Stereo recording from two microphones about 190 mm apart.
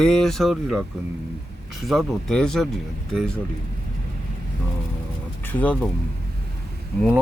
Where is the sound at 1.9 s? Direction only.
Centre (ahead or behind).